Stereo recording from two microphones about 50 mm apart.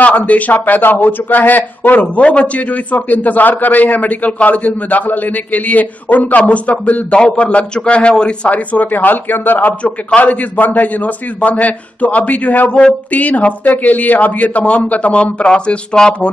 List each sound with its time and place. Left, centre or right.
0.0 s speech: left
2.0 s a man's voice: left
8.5 s speech: left
9.8 s a man's voice: left